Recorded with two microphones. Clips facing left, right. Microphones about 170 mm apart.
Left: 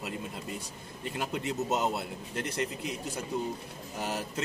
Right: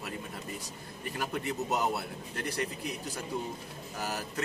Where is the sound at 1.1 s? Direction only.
25° left (ahead or behind).